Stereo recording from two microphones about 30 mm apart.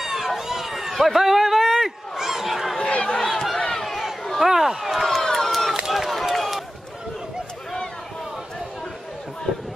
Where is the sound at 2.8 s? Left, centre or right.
Left.